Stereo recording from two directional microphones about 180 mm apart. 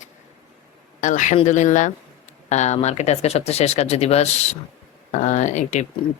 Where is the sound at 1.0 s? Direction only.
45° left (ahead or behind).